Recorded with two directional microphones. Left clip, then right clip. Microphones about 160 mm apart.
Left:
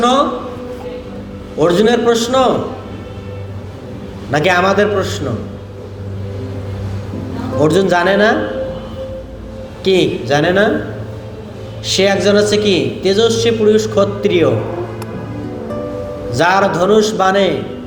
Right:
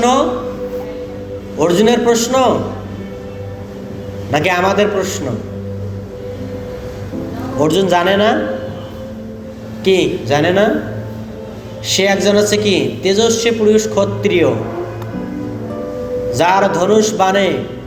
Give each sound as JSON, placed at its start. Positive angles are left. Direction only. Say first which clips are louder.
{"t": 0.0, "sound": "a man's voice", "louder": "even", "side_deg": 30}
{"t": 1.5, "sound": "a man's voice", "louder": "left 1 dB", "side_deg": 30}
{"t": 4.3, "sound": "a man's voice", "louder": "left 1 dB", "side_deg": 25}
{"t": 7.6, "sound": "a man's voice", "louder": "left 1 dB", "side_deg": 30}
{"t": 9.8, "sound": "a man's voice", "louder": "even", "side_deg": 30}
{"t": 11.9, "sound": "a man's voice", "louder": "left 1 dB", "side_deg": 30}
{"t": 16.3, "sound": "a man's voice", "louder": "even", "side_deg": 25}